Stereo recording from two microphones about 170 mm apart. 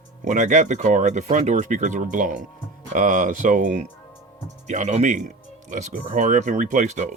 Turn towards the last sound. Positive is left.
turn(degrees=-45)  # may be behind; listen again after turning